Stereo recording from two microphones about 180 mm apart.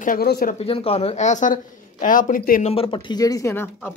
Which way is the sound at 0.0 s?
55° left (ahead or behind).